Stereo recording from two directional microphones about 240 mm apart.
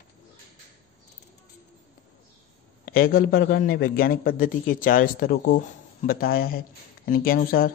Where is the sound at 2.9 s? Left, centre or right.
Left.